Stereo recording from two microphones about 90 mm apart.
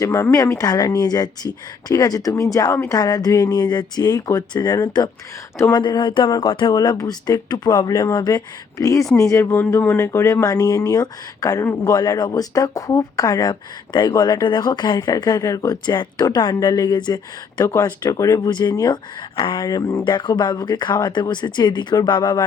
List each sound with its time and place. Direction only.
0.0 s speech: 35° left (ahead or behind)
0.7 s speech: 50° left (ahead or behind); by 6.7 s 65° left (ahead or behind)
6.7 s speech: 45° left (ahead or behind); by 10.4 s 30° left (ahead or behind)
10.4 s speech: 45° left (ahead or behind)
18.1 s speech: 40° left (ahead or behind)
20.1 s speech: 60° left (ahead or behind)